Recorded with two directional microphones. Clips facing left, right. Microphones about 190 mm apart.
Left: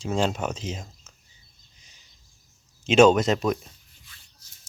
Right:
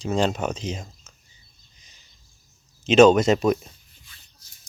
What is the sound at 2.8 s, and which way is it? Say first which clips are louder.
Speech: right 3 dB; 10° left (ahead or behind).